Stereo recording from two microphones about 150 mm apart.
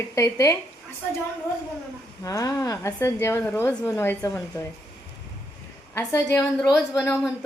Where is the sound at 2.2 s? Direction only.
20° left (ahead or behind).